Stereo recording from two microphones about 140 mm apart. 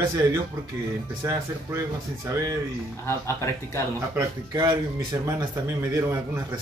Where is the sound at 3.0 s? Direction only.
20° left (ahead or behind).